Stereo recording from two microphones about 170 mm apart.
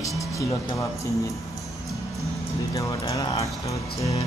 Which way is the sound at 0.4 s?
20° left (ahead or behind).